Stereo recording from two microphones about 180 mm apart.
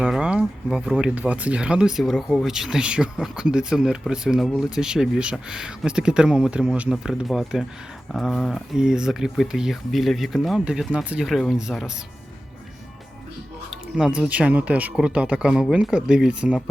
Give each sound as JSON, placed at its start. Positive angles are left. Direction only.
{"t": 0.0, "sound": "speech", "side_deg": -5}
{"t": 13.7, "sound": "speech", "side_deg": -5}